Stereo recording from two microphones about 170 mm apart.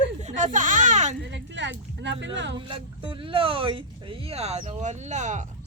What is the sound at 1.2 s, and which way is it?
Speech, 90° right.